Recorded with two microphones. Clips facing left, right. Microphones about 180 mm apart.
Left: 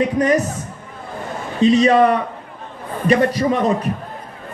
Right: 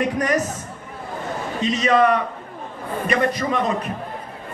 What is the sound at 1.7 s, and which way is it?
A man's voice, 30° left (ahead or behind).